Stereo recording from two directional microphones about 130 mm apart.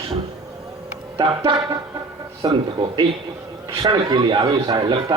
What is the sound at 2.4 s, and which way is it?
Speech, 35° right (ahead or behind).